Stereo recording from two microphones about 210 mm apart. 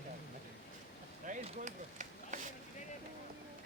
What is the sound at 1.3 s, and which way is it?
Chop, 30° right (ahead or behind).